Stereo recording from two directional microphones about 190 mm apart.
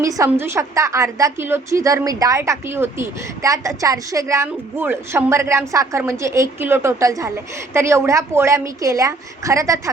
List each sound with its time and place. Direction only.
0.0 s a woman's voice: 15° right (ahead or behind)